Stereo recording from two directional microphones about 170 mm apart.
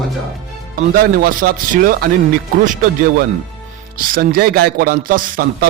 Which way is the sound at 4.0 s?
60° right (ahead or behind).